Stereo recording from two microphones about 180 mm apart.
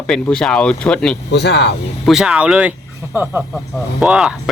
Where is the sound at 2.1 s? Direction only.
5° right (ahead or behind).